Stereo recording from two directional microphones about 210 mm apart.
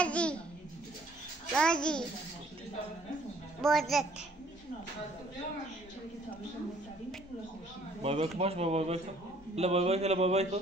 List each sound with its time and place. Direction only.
0.0 s babbling: 5° left (ahead or behind)
1.5 s a child's voice: 5° left (ahead or behind)
3.6 s a child's voice: centre (ahead or behind)
8.0 s speech: 30° right (ahead or behind)
9.6 s a sound: 30° right (ahead or behind)